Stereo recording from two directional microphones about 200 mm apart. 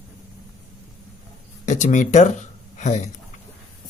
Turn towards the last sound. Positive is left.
turn(degrees=35)  # may be behind; listen again after turning